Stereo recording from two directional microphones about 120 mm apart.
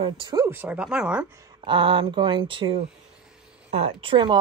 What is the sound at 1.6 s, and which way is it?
A woman's voice, 45° right (ahead or behind).